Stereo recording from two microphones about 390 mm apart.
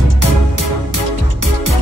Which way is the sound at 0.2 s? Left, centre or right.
Right.